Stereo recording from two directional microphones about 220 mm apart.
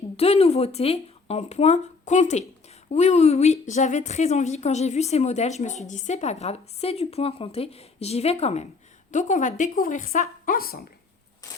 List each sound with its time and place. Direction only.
0.2 s a woman's voice: 30° left (ahead or behind); by 10.8 s 45° left (ahead or behind)